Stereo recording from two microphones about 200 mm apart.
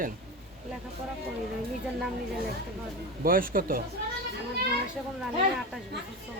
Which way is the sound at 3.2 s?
45° right (ahead or behind).